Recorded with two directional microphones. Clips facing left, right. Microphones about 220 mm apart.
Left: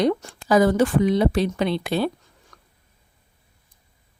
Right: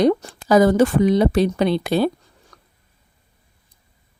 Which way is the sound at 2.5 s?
35° right (ahead or behind).